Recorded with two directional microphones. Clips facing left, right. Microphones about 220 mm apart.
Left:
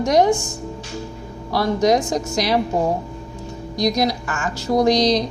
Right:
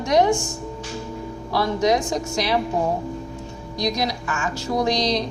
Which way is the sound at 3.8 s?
40° left (ahead or behind).